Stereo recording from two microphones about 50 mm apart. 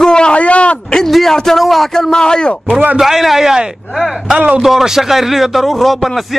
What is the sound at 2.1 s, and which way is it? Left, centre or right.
Speech, centre.